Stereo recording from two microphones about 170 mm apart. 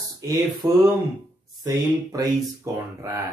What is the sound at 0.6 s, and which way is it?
Speech, 20° right (ahead or behind).